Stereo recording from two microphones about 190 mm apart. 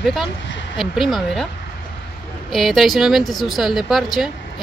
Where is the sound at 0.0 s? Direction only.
Centre (ahead or behind).